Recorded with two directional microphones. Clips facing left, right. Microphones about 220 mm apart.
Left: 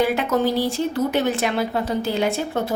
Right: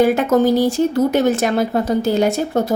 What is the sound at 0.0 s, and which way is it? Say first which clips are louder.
A woman's voice: right 6 dB; 45° right (ahead or behind).